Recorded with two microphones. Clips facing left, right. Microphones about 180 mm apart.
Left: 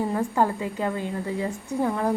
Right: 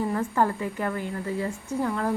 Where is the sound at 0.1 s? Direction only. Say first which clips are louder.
Left 1 dB; 15° left (ahead or behind).